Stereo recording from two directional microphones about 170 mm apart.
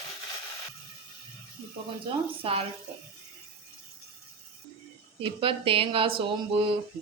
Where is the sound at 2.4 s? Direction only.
35° right (ahead or behind).